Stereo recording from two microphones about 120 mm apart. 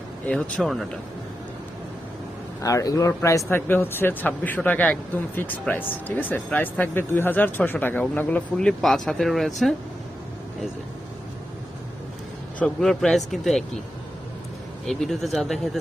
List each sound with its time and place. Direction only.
0.3 s speech: 10° left (ahead or behind)
2.6 s speech: 25° left (ahead or behind); by 9.5 s centre (ahead or behind)
12.5 s speech: 5° left (ahead or behind)
14.8 s speech: centre (ahead or behind)